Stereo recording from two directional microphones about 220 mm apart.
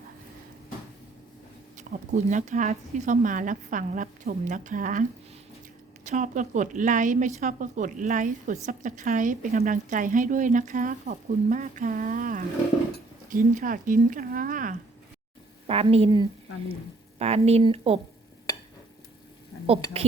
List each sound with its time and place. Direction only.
1.7 s speech: 35° right (ahead or behind)
6.1 s speech: 35° right (ahead or behind)
15.6 s speech: 25° right (ahead or behind)
19.9 s speech: 30° right (ahead or behind)